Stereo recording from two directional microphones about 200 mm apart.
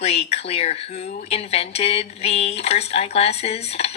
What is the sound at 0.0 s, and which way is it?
Speech, 30° left (ahead or behind).